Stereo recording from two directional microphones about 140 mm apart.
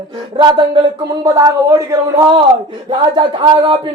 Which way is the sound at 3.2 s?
35° right (ahead or behind).